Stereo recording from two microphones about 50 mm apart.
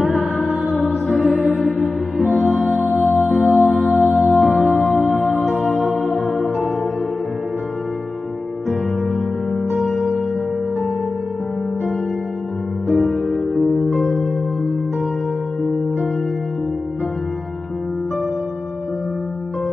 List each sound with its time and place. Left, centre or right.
0.0 s music: centre
9.5 s music: centre
12.8 s music: centre
13.9 s music: centre